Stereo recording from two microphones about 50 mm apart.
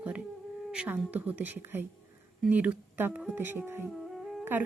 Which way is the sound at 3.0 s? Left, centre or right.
Right.